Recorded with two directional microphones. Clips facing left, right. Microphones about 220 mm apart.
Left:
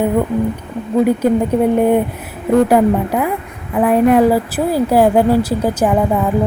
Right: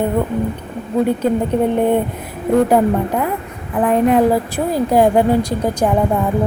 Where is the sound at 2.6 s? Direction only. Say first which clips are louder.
Left 2 dB; 10° left (ahead or behind).